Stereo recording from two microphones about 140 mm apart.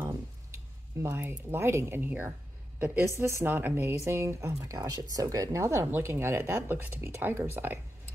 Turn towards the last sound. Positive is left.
turn(degrees=-15)  # may be behind; listen again after turning